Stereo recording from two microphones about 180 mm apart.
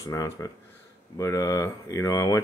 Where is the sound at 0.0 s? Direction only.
20° left (ahead or behind).